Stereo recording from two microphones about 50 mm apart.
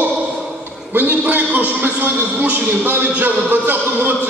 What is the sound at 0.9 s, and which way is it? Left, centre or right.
A man's voice, right.